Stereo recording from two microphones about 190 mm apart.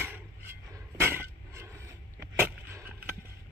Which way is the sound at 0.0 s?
10° right (ahead or behind).